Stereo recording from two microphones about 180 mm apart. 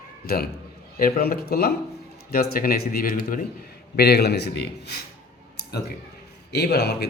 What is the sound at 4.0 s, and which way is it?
Speech, 65° left (ahead or behind).